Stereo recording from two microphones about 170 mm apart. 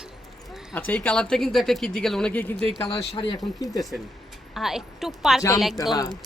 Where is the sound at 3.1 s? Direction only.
30° left (ahead or behind).